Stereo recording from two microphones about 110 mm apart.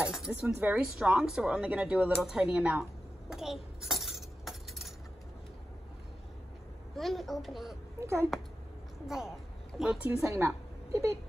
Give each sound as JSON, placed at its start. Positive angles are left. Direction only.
{"t": 0.0, "sound": "a woman's voice", "side_deg": -5}
{"t": 0.9, "sound": "speech", "side_deg": -5}
{"t": 7.0, "sound": "a child's voice", "side_deg": 0}
{"t": 8.0, "sound": "a child's voice", "side_deg": -25}
{"t": 9.0, "sound": "a child's voice", "side_deg": -5}
{"t": 10.1, "sound": "a woman's voice", "side_deg": -25}